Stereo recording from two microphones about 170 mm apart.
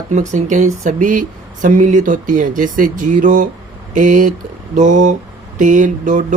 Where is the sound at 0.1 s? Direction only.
45° right (ahead or behind).